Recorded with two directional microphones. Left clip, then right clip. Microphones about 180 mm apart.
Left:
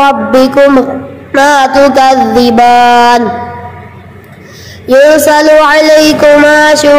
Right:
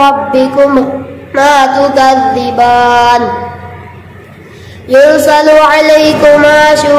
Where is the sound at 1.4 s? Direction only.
35° left (ahead or behind).